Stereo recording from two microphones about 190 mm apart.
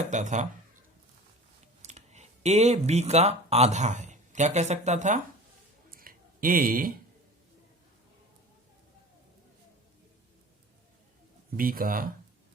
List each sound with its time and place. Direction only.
0.1 s speech: 40° right (ahead or behind)
1.8 s speech: 35° right (ahead or behind)
5.9 s a sound: 50° right (ahead or behind)
11.5 s speech: 50° right (ahead or behind)